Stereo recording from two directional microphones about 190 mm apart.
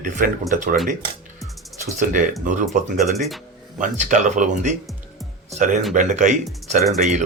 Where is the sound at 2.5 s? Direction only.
40° right (ahead or behind).